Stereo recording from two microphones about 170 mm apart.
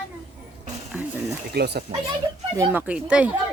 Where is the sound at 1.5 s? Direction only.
80° right.